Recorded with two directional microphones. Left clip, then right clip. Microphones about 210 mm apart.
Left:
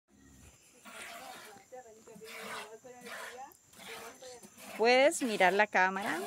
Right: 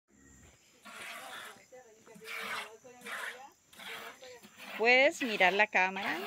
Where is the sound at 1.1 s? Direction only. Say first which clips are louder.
Right 2 dB; 15° left (ahead or behind).